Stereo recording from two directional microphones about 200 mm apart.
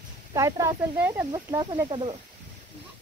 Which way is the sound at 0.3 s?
15° right (ahead or behind).